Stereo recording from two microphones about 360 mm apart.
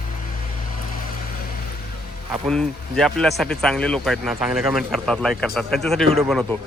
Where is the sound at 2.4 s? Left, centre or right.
Centre.